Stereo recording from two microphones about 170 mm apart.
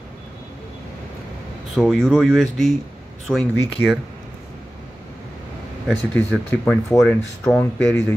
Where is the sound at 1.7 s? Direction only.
Centre (ahead or behind).